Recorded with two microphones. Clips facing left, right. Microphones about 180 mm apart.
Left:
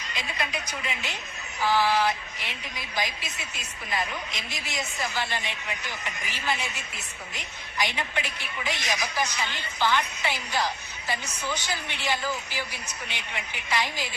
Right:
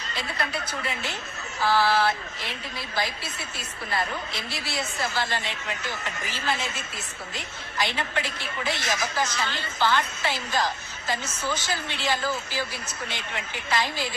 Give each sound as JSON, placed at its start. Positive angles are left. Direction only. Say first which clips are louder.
{"t": 0.1, "sound": "a woman's voice", "louder": "right 2 dB", "side_deg": 15}